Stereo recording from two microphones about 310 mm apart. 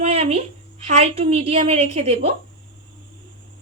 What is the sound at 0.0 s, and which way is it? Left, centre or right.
A woman's voice, centre.